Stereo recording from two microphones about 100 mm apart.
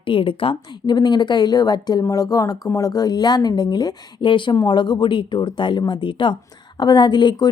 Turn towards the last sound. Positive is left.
turn(degrees=45)  # may be behind; listen again after turning